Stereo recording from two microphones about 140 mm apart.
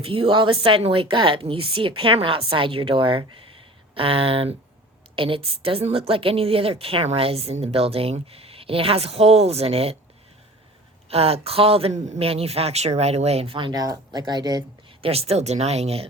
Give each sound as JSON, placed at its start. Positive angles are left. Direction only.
{"t": 0.0, "sound": "a woman's voice", "side_deg": -40}
{"t": 11.1, "sound": "a woman's voice", "side_deg": -45}
{"t": 15.0, "sound": "a woman's voice", "side_deg": -45}